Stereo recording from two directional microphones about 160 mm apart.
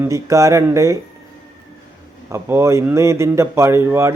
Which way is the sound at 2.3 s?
15° right (ahead or behind).